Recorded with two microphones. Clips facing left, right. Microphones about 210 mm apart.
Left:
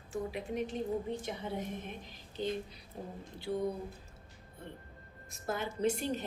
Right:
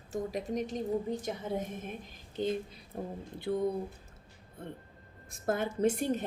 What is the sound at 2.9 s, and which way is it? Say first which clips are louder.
Speech: right 5 dB; 55° right (ahead or behind).